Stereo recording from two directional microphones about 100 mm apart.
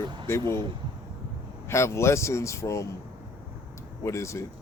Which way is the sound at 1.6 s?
25° left (ahead or behind).